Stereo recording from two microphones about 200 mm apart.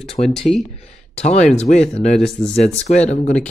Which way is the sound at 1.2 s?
35° left (ahead or behind).